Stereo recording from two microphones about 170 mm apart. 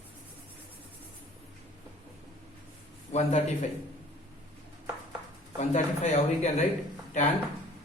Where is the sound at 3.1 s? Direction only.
40° left (ahead or behind).